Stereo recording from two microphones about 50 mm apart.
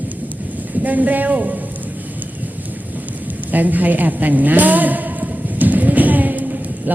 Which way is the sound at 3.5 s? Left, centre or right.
Right.